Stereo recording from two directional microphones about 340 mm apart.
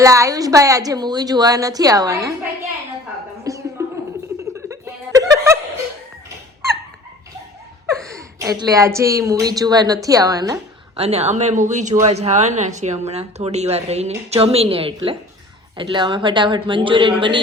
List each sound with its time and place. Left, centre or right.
0.0 s a woman's voice: centre
3.5 s music: centre
4.5 s chuckle: centre
8.1 s a woman's voice: centre